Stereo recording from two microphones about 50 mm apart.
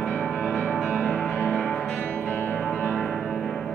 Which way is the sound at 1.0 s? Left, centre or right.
Centre.